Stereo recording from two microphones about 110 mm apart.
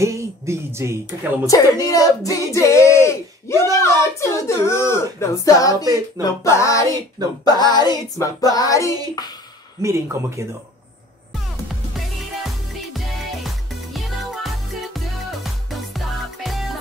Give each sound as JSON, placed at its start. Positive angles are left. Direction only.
{"t": 0.0, "sound": "speech", "side_deg": -25}
{"t": 1.4, "sound": "female singing", "side_deg": 30}
{"t": 7.7, "sound": "female singing", "side_deg": 40}
{"t": 9.8, "sound": "speech", "side_deg": -25}
{"t": 12.9, "sound": "music", "side_deg": 0}